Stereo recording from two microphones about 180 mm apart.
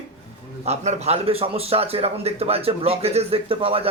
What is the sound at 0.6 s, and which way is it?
Speech, 35° right (ahead or behind).